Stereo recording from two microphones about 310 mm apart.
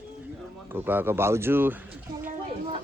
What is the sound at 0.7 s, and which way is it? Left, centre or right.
Speech, centre.